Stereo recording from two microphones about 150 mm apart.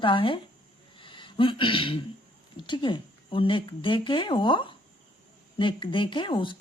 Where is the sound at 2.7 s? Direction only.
30° left (ahead or behind).